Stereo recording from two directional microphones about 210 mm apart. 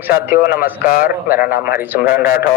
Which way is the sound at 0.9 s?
45° left (ahead or behind).